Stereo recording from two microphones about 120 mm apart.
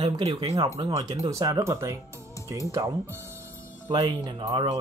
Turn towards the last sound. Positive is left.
turn(degrees=-40)  # may be behind; listen again after turning